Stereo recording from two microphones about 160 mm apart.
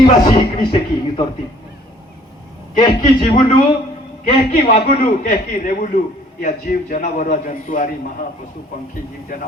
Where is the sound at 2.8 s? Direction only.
30° left (ahead or behind).